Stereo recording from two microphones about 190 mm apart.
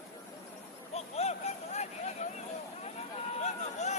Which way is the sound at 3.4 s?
35° left (ahead or behind).